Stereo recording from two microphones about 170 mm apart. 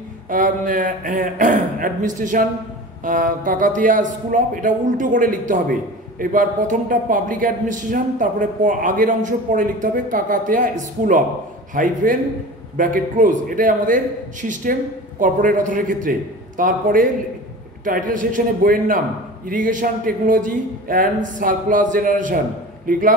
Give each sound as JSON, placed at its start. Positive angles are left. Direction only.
{"t": 0.3, "sound": "speech", "side_deg": -50}